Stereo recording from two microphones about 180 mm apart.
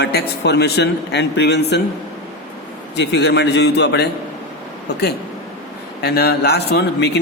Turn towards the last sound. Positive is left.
turn(degrees=65)  # may be behind; listen again after turning